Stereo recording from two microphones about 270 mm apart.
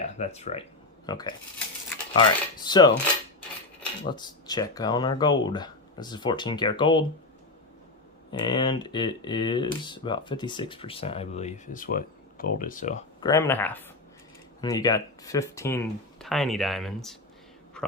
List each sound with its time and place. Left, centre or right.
0.0 s speech: left
4.1 s speech: centre
8.3 s speech: centre
13.2 s speech: centre